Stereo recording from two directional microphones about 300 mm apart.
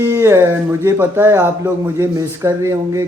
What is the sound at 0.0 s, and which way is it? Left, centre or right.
A man's voice, centre.